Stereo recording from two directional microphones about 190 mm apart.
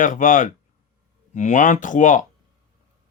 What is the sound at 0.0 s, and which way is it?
Speech, 45° left (ahead or behind).